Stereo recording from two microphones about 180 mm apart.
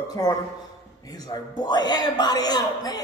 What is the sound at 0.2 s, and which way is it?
A man's voice, 20° left (ahead or behind).